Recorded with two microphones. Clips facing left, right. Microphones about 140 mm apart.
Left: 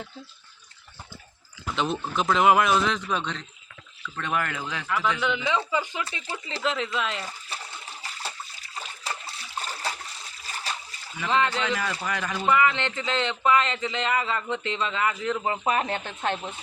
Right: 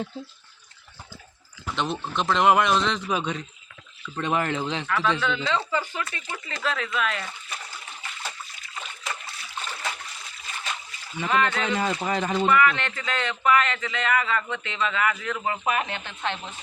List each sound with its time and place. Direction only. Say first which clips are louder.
1.7 s speech: left 1 dB; 5° left (ahead or behind)
3.1 s a man's voice: right 2 dB; 10° right (ahead or behind)
4.0 s speech: right 3 dB; 20° right (ahead or behind)
5.2 s speech: even; 15° left (ahead or behind)
6.2 s water: left 3 dB; 25° left (ahead or behind)
10.4 s a sound: even; 35° left (ahead or behind)
11.3 s speech: even; 25° left (ahead or behind)
11.6 s speech: right 3 dB; 30° right (ahead or behind)
12.5 s speech: left 1 dB; 20° left (ahead or behind); by 16.4 s 40° left (ahead or behind)